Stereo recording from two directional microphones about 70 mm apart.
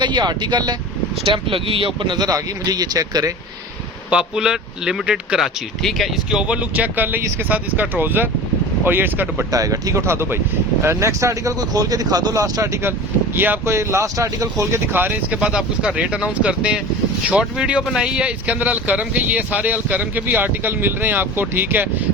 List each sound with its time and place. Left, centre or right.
0.0 s speech: right
2.1 s speech: right
4.1 s speech: centre
5.4 s speech: centre
6.3 s speech: centre
9.5 s speech: right
12.6 s speech: right
13.3 s speech: right
13.7 s speech: right
14.9 s speech: right
15.3 s speech: centre; by 22.0 s right